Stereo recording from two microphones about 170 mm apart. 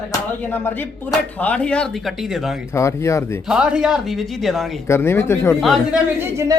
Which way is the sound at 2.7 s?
15° left (ahead or behind).